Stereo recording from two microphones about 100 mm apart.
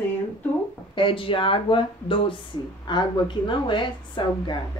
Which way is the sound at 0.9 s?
60° left (ahead or behind).